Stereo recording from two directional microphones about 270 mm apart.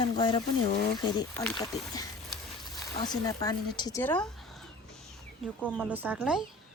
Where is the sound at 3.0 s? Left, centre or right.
Centre.